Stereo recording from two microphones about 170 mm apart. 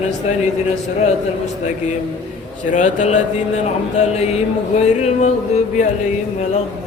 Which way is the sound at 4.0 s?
40° left (ahead or behind).